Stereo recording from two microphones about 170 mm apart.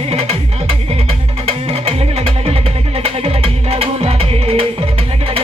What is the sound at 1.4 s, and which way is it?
Music, 35° right (ahead or behind).